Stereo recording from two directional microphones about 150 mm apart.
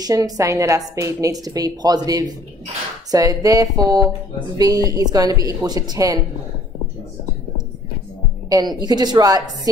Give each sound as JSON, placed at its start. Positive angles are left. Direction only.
{"t": 0.0, "sound": "a woman's voice", "side_deg": -25}
{"t": 8.5, "sound": "a woman's voice", "side_deg": -25}